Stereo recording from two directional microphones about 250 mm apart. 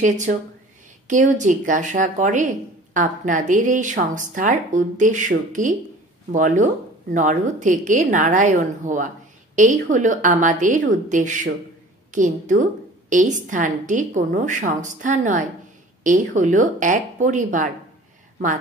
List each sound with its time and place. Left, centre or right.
0.0 s speech: right